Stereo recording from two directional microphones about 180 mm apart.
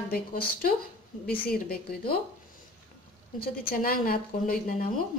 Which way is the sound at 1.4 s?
55° left (ahead or behind).